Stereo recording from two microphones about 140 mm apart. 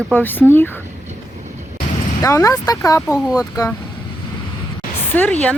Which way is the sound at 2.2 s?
25° left (ahead or behind).